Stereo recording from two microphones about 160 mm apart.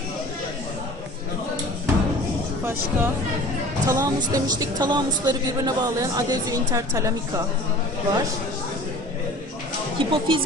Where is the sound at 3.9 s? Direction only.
20° right (ahead or behind).